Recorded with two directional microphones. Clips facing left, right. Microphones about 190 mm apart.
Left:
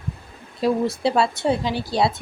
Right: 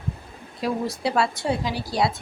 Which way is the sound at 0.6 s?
25° left (ahead or behind).